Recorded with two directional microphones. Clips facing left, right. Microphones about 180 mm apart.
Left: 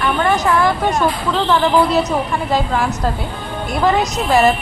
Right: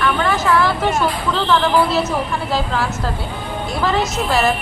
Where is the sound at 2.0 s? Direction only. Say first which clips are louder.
Left 2 dB; 15° left (ahead or behind).